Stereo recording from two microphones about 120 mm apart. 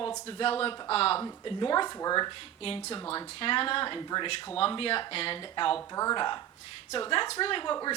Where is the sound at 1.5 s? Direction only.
40° left (ahead or behind).